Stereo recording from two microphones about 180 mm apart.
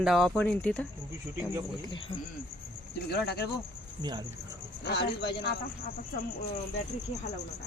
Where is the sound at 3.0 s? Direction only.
65° left (ahead or behind).